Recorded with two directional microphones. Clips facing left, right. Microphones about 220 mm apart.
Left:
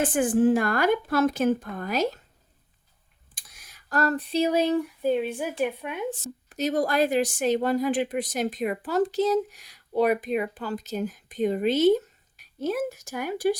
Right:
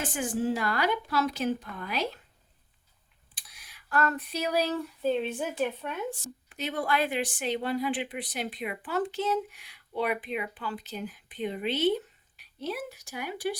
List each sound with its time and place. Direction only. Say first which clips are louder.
0.0 s a woman's voice: left 9 dB; 55° left (ahead or behind)
3.3 s a sound: left 2 dB; 45° left (ahead or behind); by 6.3 s 15° left (ahead or behind)
6.5 s a woman's voice: left 6 dB; 40° left (ahead or behind)